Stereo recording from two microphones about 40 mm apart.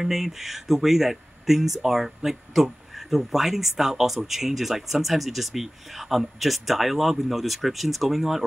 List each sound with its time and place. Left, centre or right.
0.0 s speech: centre